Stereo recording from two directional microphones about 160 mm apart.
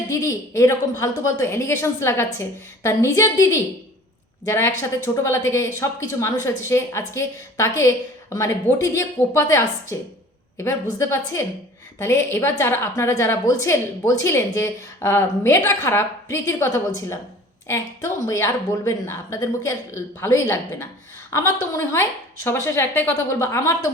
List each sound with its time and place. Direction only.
0.1 s a woman's voice: 20° left (ahead or behind)